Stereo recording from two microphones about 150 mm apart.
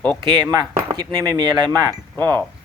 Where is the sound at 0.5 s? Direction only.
25° right (ahead or behind).